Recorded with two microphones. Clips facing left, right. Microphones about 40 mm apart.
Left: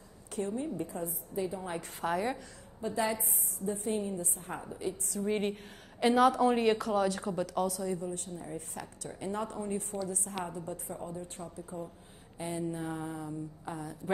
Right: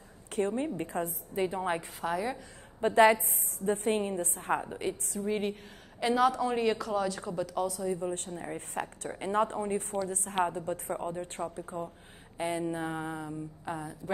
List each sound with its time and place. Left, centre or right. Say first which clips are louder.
0.3 s a woman's voice: right 4 dB; right
2.0 s a woman's voice: even; centre
2.8 s a woman's voice: right 10 dB; right
5.2 s a woman's voice: even; centre
8.0 s a woman's voice: right 4 dB; right